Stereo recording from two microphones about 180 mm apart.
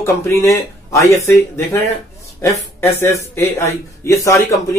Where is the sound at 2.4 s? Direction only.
15° left (ahead or behind).